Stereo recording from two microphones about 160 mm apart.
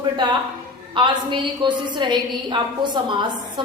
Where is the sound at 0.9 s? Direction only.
30° right (ahead or behind).